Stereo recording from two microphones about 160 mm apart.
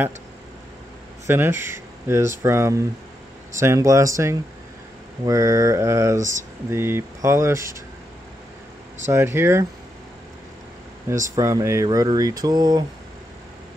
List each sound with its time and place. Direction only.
1.2 s speech: 15° right (ahead or behind)
9.1 s speech: 15° right (ahead or behind)
11.3 s speech: 20° right (ahead or behind)